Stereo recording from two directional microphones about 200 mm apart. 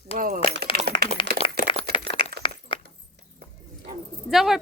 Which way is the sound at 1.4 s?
30° left (ahead or behind).